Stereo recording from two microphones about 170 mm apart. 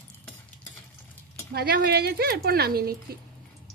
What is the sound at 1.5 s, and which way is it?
Speech, 70° right (ahead or behind).